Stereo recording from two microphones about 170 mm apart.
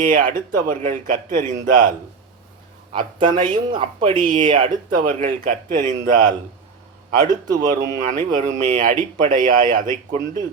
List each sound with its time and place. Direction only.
0.0 s speech: 50° right (ahead or behind)
2.9 s speech: 30° right (ahead or behind)
4.9 s speech: 55° right (ahead or behind)
7.5 s speech: 50° right (ahead or behind)